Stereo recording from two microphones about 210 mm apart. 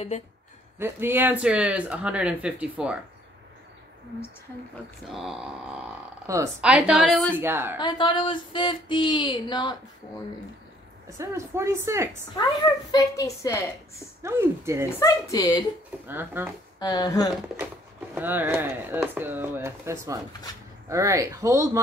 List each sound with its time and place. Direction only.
0.7 s speech: 10° right (ahead or behind)
5.1 s speech: centre (ahead or behind)
6.2 s speech: 15° right (ahead or behind)
7.8 s speech: 20° left (ahead or behind)
11.1 s speech: 15° right (ahead or behind)
12.9 s a woman's voice: 15° left (ahead or behind)
14.2 s speech: 10° right (ahead or behind)
15.0 s a woman's voice: 15° left (ahead or behind)
16.1 s speech: 10° right (ahead or behind)
16.8 s speech: 20° left (ahead or behind)
18.1 s speech: 10° right (ahead or behind)